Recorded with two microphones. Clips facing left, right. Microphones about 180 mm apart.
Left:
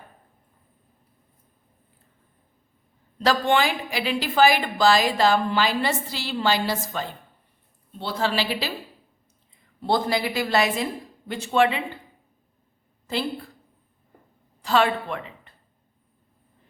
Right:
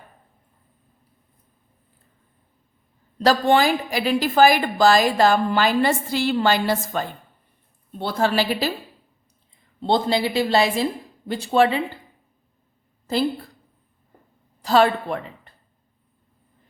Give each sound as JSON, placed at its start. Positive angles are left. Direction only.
{"t": 3.2, "sound": "a woman's voice", "side_deg": -35}
{"t": 9.8, "sound": "speech", "side_deg": -25}
{"t": 14.6, "sound": "a woman's voice", "side_deg": -40}